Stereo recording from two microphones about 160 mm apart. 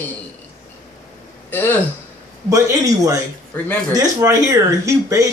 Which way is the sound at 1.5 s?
10° left (ahead or behind).